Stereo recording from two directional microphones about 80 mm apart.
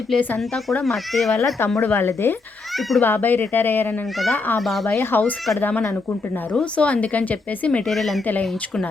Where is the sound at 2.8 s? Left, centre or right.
Centre.